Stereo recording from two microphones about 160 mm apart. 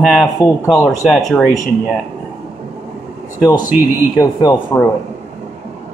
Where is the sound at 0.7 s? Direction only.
20° left (ahead or behind).